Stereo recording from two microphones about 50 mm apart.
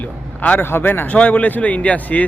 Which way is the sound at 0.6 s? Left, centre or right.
Left.